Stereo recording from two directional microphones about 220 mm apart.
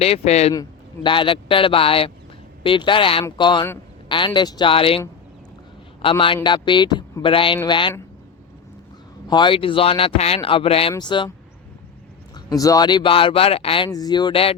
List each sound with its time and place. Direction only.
0.0 s a man's voice: 30° left (ahead or behind)
9.2 s a man's voice: 20° left (ahead or behind)
12.5 s a man's voice: 15° left (ahead or behind)